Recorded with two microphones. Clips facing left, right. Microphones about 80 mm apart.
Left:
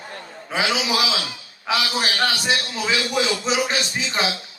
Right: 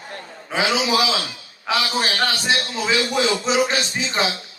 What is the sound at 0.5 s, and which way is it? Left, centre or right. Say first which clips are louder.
A man's voice: right 2 dB; right.